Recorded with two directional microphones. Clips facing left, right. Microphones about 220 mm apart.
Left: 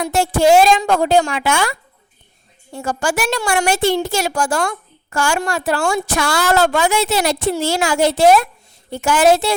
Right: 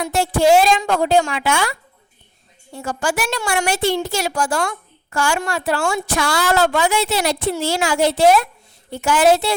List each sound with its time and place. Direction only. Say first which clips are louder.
0.1 s a woman's voice: left 1 dB; 45° left (ahead or behind)
2.7 s a woman's voice: left 2 dB; 45° left (ahead or behind)